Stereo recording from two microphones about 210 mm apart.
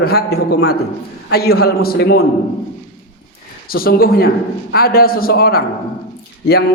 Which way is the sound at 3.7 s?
45° left (ahead or behind).